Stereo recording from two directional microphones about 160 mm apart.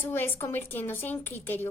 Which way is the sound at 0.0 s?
15° left (ahead or behind).